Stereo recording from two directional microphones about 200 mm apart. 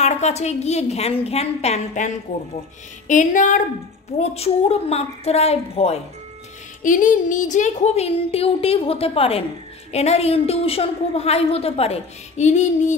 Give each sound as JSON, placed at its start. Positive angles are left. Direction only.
{"t": 0.0, "sound": "a woman's voice", "side_deg": 35}